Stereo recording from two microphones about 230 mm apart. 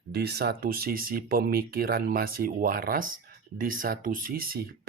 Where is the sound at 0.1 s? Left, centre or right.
Right.